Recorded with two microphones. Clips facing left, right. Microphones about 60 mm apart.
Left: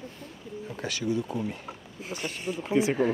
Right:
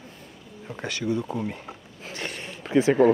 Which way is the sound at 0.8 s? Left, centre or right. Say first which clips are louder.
Right 2 dB; right.